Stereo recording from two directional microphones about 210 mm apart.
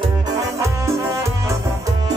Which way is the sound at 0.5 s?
15° right (ahead or behind).